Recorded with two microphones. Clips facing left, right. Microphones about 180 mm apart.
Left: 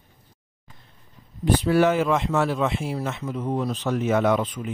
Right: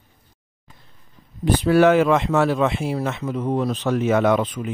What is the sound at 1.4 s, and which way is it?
Speech, 75° right (ahead or behind).